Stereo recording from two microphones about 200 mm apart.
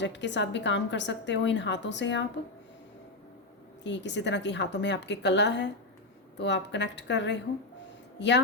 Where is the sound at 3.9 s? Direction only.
60° left (ahead or behind).